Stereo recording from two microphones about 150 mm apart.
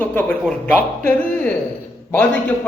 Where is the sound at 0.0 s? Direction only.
10° left (ahead or behind).